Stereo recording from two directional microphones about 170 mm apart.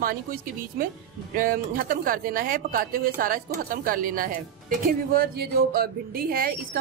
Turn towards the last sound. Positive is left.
turn(degrees=-60)  # may be behind; listen again after turning